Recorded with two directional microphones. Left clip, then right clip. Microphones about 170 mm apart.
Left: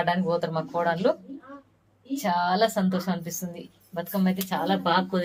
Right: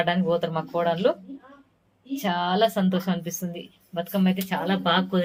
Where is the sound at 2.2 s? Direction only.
15° right (ahead or behind).